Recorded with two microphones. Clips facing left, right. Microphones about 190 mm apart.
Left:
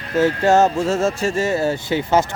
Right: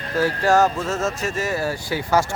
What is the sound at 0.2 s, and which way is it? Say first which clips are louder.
A man's voice: left 3 dB; 25° left (ahead or behind).